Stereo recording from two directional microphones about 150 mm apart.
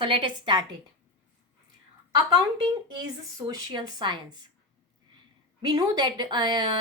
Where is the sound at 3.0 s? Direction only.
25° right (ahead or behind).